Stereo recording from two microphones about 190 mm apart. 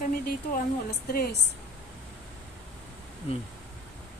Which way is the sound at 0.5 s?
50° left (ahead or behind).